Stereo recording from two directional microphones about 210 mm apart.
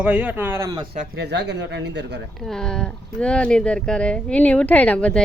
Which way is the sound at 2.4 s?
5° left (ahead or behind).